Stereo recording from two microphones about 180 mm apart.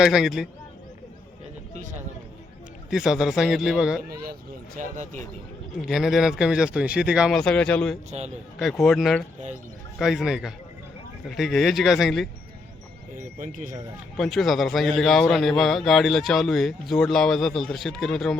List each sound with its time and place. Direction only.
0.0 s a man's voice: centre (ahead or behind)
2.9 s a man's voice: 5° right (ahead or behind)
4.1 s speech: 55° right (ahead or behind)
4.8 s speech: 45° right (ahead or behind)
5.9 s a man's voice: centre (ahead or behind)
13.4 s speech: 45° right (ahead or behind)
14.2 s a man's voice: centre (ahead or behind)